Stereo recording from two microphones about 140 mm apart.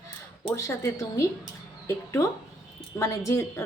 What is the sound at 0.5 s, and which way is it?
Speech, 20° left (ahead or behind).